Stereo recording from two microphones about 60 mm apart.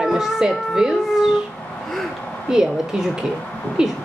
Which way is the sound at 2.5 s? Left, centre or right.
Centre.